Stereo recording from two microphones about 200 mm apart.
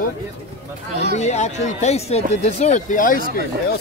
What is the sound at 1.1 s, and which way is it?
Speech, 35° left (ahead or behind).